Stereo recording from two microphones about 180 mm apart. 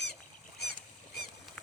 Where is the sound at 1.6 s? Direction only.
5° left (ahead or behind).